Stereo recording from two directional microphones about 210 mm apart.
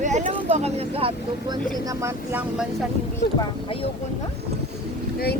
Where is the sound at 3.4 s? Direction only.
25° left (ahead or behind).